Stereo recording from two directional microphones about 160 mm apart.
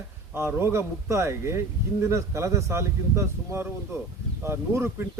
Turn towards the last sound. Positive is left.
turn(degrees=-15)  # may be behind; listen again after turning